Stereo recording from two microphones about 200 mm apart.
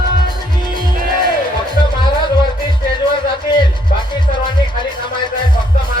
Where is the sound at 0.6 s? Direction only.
25° left (ahead or behind).